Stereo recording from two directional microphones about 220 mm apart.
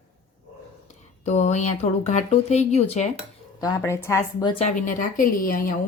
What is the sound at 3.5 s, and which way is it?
A woman's voice, 15° left (ahead or behind).